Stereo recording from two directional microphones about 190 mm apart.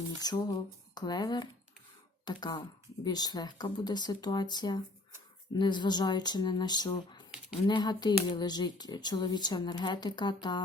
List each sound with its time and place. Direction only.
0.2 s speech: 20° left (ahead or behind)